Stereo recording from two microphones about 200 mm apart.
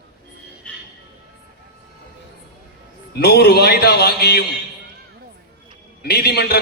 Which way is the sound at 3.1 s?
55° left (ahead or behind).